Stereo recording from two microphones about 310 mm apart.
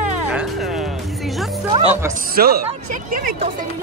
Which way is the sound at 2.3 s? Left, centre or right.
Right.